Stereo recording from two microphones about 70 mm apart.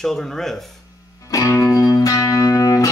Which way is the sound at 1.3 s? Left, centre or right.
Left.